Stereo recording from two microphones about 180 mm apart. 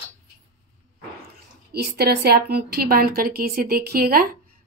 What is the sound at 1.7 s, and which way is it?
A woman's voice, 65° right (ahead or behind).